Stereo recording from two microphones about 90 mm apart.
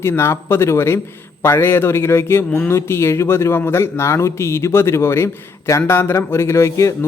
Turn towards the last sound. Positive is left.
turn(degrees=35)  # may be behind; listen again after turning